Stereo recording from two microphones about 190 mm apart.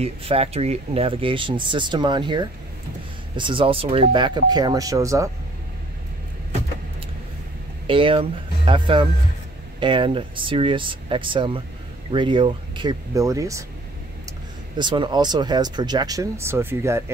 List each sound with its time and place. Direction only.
0.0 s speech: 30° right (ahead or behind)
7.8 s speech: 25° right (ahead or behind)
14.8 s speech: 25° right (ahead or behind)